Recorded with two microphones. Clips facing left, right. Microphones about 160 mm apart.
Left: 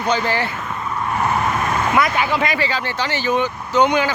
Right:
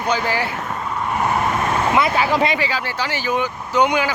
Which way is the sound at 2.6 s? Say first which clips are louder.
Left 1 dB; 10° right (ahead or behind).